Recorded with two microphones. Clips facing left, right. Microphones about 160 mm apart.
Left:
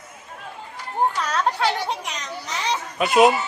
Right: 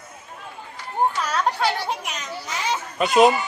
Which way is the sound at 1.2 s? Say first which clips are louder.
Even; centre (ahead or behind).